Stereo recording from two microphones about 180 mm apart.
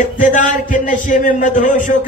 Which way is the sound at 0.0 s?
45° left (ahead or behind).